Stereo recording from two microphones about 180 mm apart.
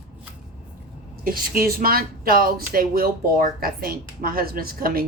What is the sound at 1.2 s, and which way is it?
A woman's voice, 55° right (ahead or behind).